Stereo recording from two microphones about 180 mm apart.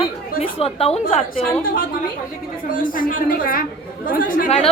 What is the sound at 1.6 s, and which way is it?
A woman's voice, 50° left (ahead or behind).